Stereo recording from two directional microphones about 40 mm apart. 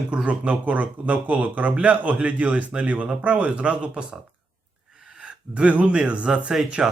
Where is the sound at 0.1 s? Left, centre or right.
Right.